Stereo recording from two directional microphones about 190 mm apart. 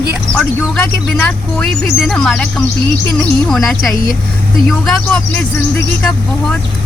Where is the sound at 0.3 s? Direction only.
5° left (ahead or behind).